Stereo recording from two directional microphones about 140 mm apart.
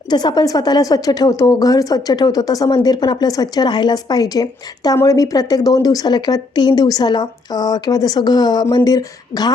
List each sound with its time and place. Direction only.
0.1 s speech: 30° left (ahead or behind)